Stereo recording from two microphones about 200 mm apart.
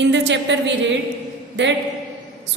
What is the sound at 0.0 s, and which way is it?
Speech, 65° right (ahead or behind).